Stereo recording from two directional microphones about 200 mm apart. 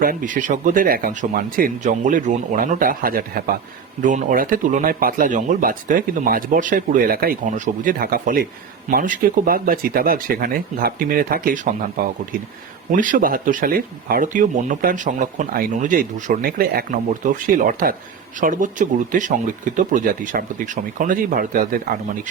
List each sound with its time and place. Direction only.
0.0 s speech: 45° right (ahead or behind)